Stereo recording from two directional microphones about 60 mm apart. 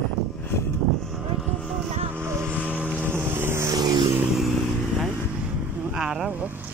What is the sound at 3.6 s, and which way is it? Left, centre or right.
Vehicle, right.